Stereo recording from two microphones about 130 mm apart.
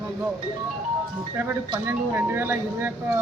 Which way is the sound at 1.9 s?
15° right (ahead or behind).